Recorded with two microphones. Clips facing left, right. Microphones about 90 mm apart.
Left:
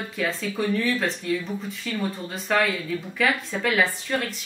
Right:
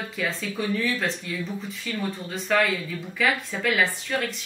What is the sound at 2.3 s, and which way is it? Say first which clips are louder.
Speech: right 1 dB; centre (ahead or behind).